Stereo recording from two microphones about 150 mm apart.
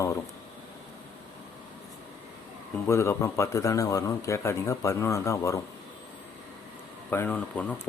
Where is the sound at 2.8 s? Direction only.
20° left (ahead or behind).